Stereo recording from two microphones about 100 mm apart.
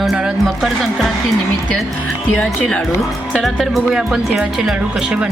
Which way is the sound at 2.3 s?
10° left (ahead or behind).